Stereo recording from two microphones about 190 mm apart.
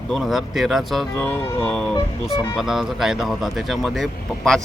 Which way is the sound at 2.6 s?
Centre (ahead or behind).